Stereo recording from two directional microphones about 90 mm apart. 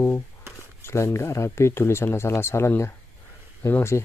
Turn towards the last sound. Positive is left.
turn(degrees=30)  # may be behind; listen again after turning